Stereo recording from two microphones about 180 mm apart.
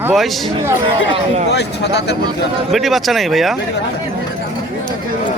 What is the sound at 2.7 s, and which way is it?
Speech, centre (ahead or behind).